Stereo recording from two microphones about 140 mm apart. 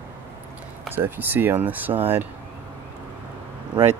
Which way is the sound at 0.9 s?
15° right (ahead or behind).